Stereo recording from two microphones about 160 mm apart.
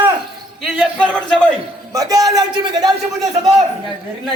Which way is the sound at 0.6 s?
Centre (ahead or behind).